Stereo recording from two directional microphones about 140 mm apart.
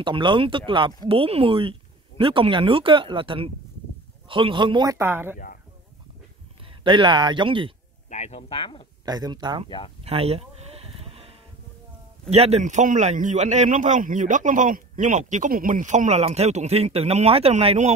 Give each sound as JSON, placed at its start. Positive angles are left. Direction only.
{"t": 0.0, "sound": "speech", "side_deg": -35}
{"t": 4.9, "sound": "speech", "side_deg": -15}
{"t": 6.6, "sound": "a man's voice", "side_deg": -35}
{"t": 8.1, "sound": "a sound", "side_deg": 55}
{"t": 8.4, "sound": "speech", "side_deg": 40}
{"t": 9.0, "sound": "speech", "side_deg": -30}
{"t": 9.7, "sound": "speech", "side_deg": 40}
{"t": 10.0, "sound": "a sound", "side_deg": -45}
{"t": 12.3, "sound": "a man's voice", "side_deg": -50}